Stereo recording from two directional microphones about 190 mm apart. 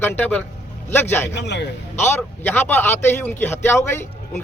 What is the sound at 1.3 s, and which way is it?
Speech, 65° left (ahead or behind).